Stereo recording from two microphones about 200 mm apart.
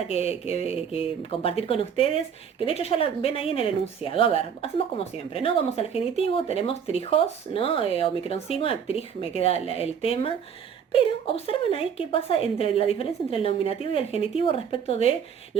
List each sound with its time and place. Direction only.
0.1 s speech: 30° left (ahead or behind)